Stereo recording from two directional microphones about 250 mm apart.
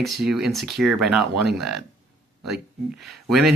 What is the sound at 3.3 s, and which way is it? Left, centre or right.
Speech, centre.